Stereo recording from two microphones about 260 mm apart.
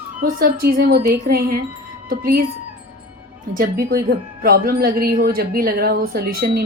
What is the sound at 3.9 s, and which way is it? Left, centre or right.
Speech, right.